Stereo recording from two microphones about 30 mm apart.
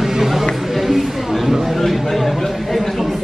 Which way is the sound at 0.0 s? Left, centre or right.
Centre.